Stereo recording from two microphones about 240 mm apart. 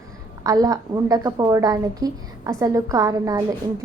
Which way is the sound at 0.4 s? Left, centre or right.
Centre.